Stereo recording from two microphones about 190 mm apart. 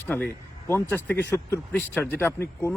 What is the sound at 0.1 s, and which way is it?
Speech, 10° left (ahead or behind).